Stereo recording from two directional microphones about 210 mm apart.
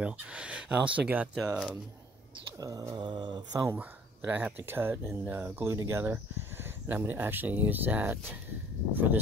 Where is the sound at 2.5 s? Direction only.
15° right (ahead or behind).